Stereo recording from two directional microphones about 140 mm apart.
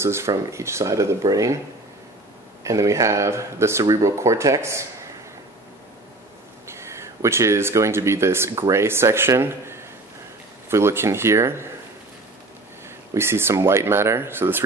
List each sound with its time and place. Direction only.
0.0 s speech: 20° right (ahead or behind)
2.6 s speech: 20° right (ahead or behind)
6.7 s speech: 20° right (ahead or behind)
13.1 s speech: 20° right (ahead or behind)